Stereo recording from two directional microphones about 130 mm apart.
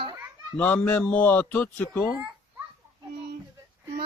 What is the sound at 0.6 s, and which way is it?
Speech, 10° left (ahead or behind).